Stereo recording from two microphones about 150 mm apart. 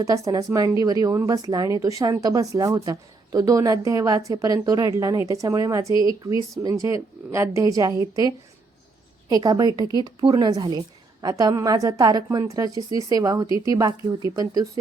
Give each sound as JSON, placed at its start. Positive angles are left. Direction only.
{"t": 0.0, "sound": "speech", "side_deg": -25}
{"t": 9.3, "sound": "speech", "side_deg": -25}